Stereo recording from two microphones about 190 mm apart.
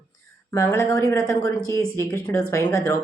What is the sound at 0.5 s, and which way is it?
Speech, 15° left (ahead or behind).